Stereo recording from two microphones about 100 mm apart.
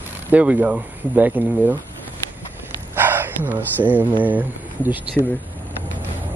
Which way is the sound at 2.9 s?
20° right (ahead or behind).